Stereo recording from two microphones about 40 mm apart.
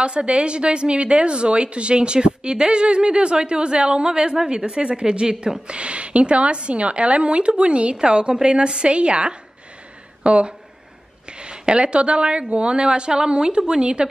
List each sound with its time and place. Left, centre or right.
0.0 s a woman's voice: right
5.7 s a woman's voice: right